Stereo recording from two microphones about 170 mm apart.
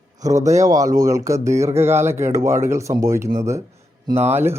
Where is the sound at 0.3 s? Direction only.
45° right (ahead or behind).